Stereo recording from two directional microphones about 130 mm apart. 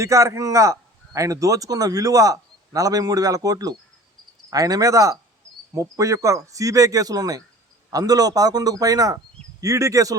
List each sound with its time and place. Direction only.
0.0 s a man's voice: 25° right (ahead or behind)